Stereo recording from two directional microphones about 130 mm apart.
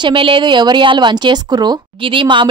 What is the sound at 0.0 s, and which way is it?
A woman's voice, 40° right (ahead or behind).